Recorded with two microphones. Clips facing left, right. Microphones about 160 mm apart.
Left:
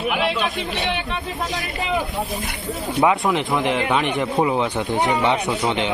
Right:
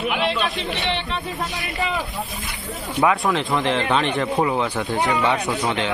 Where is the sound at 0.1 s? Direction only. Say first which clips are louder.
Left 2 dB; 10° left (ahead or behind).